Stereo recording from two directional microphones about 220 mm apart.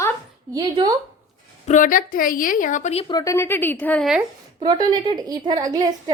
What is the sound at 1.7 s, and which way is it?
A woman's voice, 35° left (ahead or behind).